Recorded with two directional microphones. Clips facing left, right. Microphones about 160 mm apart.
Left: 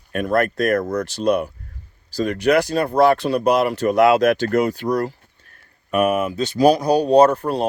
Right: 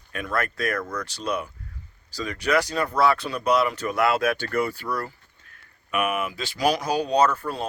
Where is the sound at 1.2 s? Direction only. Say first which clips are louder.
Left 10 dB; 60° left (ahead or behind).